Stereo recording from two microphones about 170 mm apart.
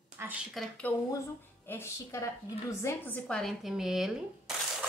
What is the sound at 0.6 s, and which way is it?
Speech, centre (ahead or behind).